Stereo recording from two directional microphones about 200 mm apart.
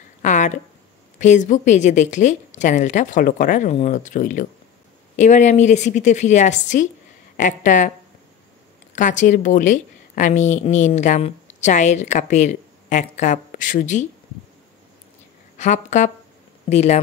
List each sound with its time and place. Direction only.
0.2 s a sound: 40° left (ahead or behind)
1.2 s a woman's voice: 40° left (ahead or behind)
8.9 s a woman's voice: 40° left (ahead or behind)
15.6 s a woman's voice: 35° left (ahead or behind)